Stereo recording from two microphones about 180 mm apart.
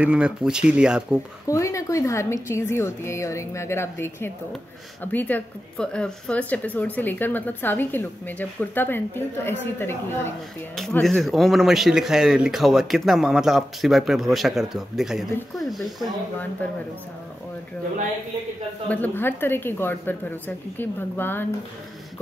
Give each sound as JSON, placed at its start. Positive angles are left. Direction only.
{"t": 0.0, "sound": "speech", "side_deg": -5}
{"t": 1.5, "sound": "speech", "side_deg": 15}
{"t": 10.8, "sound": "speech", "side_deg": 0}
{"t": 18.9, "sound": "speech", "side_deg": 10}